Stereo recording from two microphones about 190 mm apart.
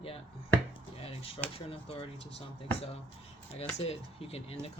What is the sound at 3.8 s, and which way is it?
Speech, 30° left (ahead or behind).